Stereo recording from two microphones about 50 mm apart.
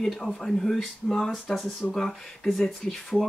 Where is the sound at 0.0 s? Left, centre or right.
Centre.